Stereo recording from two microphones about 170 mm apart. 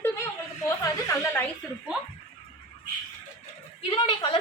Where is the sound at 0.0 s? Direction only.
15° left (ahead or behind).